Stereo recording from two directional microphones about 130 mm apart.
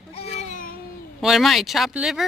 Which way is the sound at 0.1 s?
55° left (ahead or behind).